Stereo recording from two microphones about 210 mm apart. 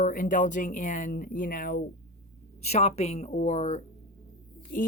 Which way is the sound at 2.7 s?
30° left (ahead or behind).